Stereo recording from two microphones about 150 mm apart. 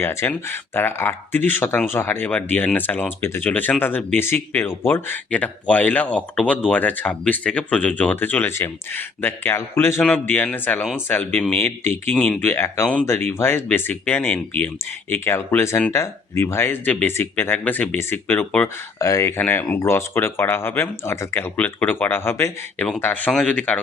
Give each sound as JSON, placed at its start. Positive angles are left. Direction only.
{"t": 0.0, "sound": "speech", "side_deg": 15}